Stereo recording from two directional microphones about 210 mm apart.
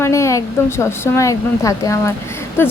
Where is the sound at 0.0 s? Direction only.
15° left (ahead or behind).